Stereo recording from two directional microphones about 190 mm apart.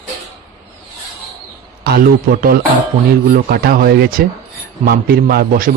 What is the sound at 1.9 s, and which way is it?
A man's voice, 50° right (ahead or behind).